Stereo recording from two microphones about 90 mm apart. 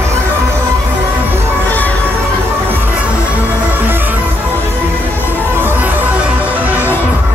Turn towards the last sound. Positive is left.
turn(degrees=-15)  # may be behind; listen again after turning